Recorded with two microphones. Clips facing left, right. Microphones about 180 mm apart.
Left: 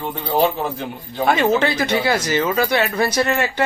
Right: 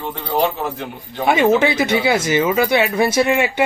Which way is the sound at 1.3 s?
10° right (ahead or behind).